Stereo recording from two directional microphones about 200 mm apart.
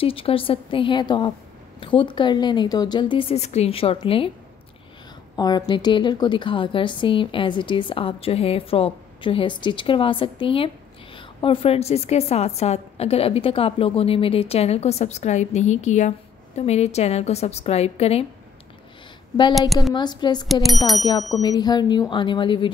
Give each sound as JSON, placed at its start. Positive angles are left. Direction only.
{"t": 0.0, "sound": "a woman's voice", "side_deg": 25}
{"t": 5.3, "sound": "a woman's voice", "side_deg": 20}
{"t": 19.9, "sound": "a woman's voice", "side_deg": 20}
{"t": 20.6, "sound": "bicycle bell", "side_deg": 0}
{"t": 21.3, "sound": "a woman's voice", "side_deg": 20}